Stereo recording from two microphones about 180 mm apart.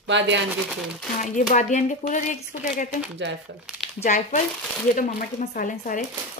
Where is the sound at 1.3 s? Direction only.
45° left (ahead or behind).